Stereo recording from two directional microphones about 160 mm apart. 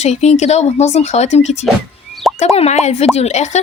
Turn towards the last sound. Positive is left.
turn(degrees=45)  # may be behind; listen again after turning